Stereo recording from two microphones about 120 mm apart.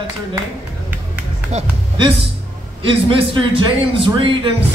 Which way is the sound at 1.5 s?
70° right (ahead or behind).